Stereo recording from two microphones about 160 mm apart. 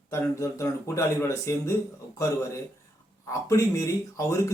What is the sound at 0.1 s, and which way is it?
Speech, 20° left (ahead or behind).